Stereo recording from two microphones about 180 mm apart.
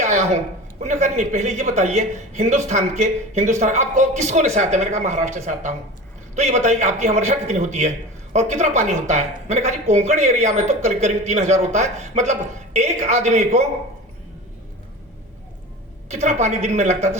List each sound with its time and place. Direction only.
0.0 s a sound: 40° right (ahead or behind)
0.8 s speech: 40° right (ahead or behind)
16.0 s speech: 40° right (ahead or behind)